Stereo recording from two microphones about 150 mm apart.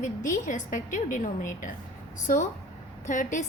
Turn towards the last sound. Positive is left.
turn(degrees=55)  # may be behind; listen again after turning